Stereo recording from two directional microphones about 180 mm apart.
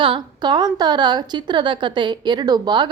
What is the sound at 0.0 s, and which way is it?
A woman's voice, 25° right (ahead or behind).